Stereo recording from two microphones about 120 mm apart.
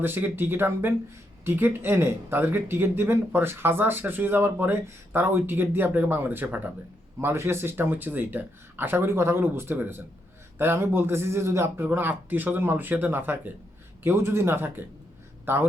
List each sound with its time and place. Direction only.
0.0 s speech: 15° right (ahead or behind)